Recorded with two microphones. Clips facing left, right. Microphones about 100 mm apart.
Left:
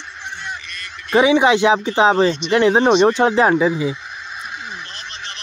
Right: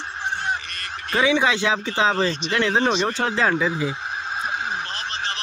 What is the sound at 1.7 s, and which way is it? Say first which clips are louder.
Speech: left 7 dB; 30° left (ahead or behind).